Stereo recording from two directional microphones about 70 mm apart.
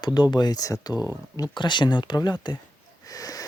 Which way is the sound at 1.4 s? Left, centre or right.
Left.